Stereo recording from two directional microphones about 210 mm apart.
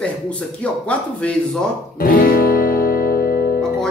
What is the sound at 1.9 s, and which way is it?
Music, 40° left (ahead or behind).